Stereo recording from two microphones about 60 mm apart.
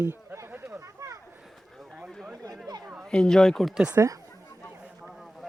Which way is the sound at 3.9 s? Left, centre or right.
Right.